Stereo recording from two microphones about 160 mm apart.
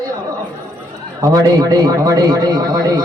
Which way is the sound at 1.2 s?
25° right (ahead or behind).